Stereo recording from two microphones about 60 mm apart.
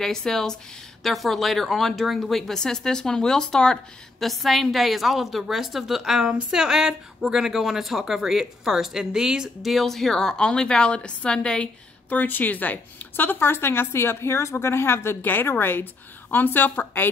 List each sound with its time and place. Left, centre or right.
0.0 s a woman's voice: centre
9.7 s a woman's voice: centre
12.2 s a woman's voice: left